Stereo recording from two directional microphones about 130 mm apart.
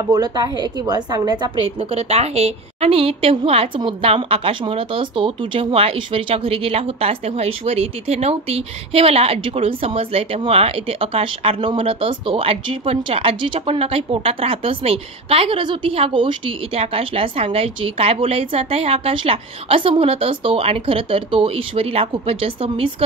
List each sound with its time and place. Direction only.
0.1 s a woman's voice: 30° right (ahead or behind)